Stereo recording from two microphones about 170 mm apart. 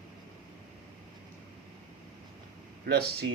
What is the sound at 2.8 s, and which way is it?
Speech, 70° right (ahead or behind).